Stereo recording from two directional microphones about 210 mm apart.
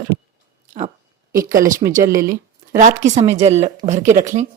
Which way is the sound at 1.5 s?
40° right (ahead or behind).